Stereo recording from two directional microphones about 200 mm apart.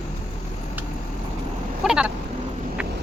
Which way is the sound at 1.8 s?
5° right (ahead or behind).